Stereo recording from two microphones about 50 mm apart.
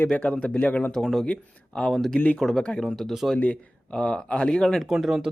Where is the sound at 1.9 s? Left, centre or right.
Centre.